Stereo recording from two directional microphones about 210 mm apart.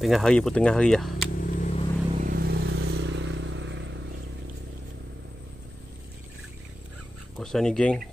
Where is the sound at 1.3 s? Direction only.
40° left (ahead or behind).